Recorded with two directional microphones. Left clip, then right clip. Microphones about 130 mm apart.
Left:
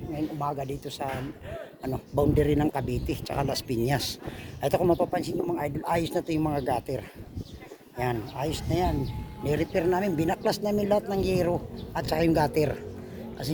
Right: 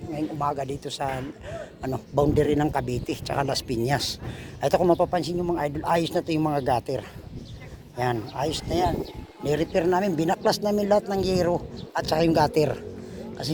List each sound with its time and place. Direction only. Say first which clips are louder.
0.2 s a man's voice: right 4 dB; centre (ahead or behind); by 3.8 s 20° left (ahead or behind)
3.8 s speech: right 4 dB; 30° left (ahead or behind)
4.6 s speech: right 4 dB; 10° left (ahead or behind)
4.9 s a man's voice: right 3 dB; 5° right (ahead or behind); by 10.3 s 15° left (ahead or behind)
10.3 s speech: right 4 dB; 70° right (ahead or behind)
11.1 s speech: right 3 dB; 10° left (ahead or behind)